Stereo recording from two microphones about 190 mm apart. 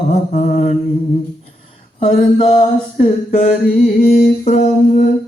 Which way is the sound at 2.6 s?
40° left (ahead or behind).